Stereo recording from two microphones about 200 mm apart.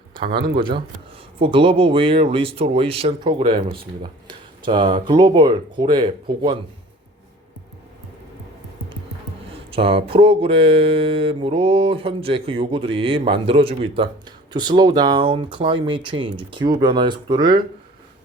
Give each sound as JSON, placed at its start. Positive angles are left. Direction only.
{"t": 0.1, "sound": "speech", "side_deg": -25}
{"t": 9.7, "sound": "speech", "side_deg": -30}